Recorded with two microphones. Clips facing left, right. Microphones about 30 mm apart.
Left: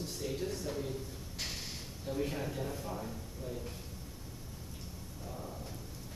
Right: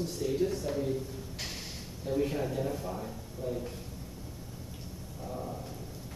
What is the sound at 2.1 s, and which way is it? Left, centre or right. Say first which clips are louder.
Speech: right 6 dB; centre.